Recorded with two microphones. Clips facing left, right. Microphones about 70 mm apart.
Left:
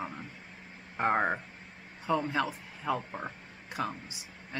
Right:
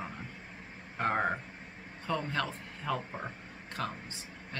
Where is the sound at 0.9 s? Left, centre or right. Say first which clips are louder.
Left 3 dB; centre.